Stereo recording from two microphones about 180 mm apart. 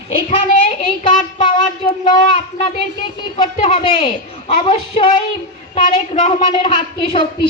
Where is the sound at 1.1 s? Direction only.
30° left (ahead or behind).